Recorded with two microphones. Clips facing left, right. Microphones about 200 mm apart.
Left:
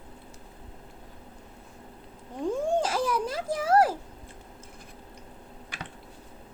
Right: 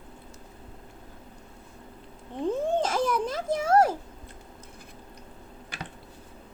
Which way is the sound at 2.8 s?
30° left (ahead or behind).